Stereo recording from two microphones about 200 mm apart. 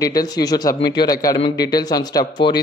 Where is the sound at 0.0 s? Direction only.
20° left (ahead or behind).